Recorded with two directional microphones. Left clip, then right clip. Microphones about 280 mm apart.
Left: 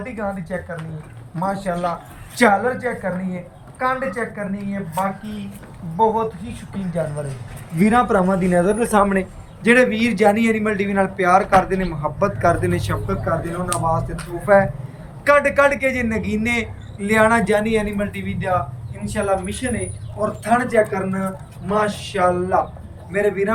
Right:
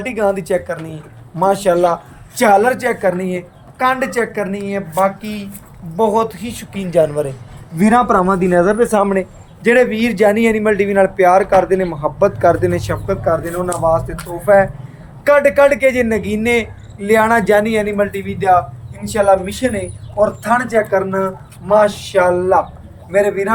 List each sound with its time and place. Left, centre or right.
0.0 s a man's voice: right
6.0 s a man's voice: right
7.8 s a man's voice: right
20.4 s a man's voice: centre